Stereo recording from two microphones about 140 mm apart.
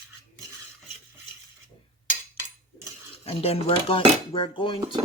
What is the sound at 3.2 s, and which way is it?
Speech, 45° left (ahead or behind).